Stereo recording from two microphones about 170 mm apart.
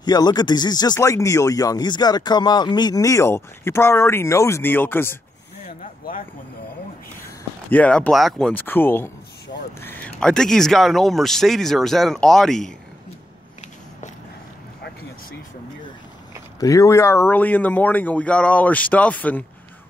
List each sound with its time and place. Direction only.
0.0 s speech: 25° left (ahead or behind)
7.7 s speech: 10° left (ahead or behind)
16.5 s speech: 20° left (ahead or behind)